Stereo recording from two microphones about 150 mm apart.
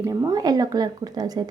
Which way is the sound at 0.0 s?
20° right (ahead or behind).